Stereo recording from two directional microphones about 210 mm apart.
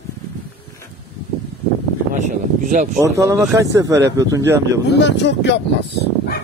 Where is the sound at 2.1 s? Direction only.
35° right (ahead or behind).